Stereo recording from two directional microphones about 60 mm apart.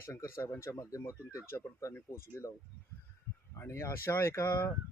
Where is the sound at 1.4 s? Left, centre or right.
Left.